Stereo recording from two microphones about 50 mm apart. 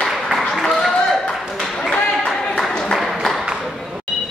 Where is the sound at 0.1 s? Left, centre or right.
Centre.